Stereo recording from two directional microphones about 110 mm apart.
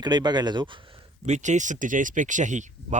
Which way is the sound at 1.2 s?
90° right.